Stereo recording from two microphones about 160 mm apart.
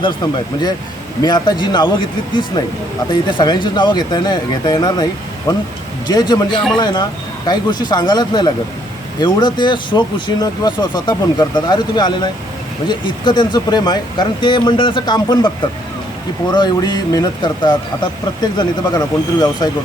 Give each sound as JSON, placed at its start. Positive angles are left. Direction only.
{"t": 1.2, "sound": "speech", "side_deg": 25}
{"t": 3.1, "sound": "speech", "side_deg": 30}
{"t": 16.5, "sound": "speech", "side_deg": 25}